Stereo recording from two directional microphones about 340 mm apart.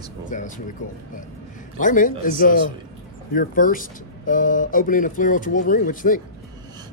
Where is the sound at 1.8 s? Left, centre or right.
Left.